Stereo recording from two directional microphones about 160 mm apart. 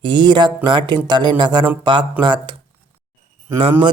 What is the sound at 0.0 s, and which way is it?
Speech, 30° right (ahead or behind).